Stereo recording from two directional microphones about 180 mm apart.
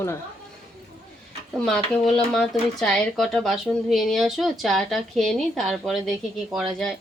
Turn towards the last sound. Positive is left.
turn(degrees=0)  # may be behind; listen again after turning